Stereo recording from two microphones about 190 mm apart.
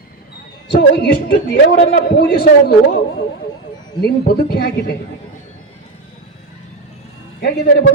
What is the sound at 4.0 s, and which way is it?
Speech, 55° left (ahead or behind).